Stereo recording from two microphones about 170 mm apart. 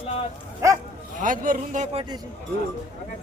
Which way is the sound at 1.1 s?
50° right (ahead or behind).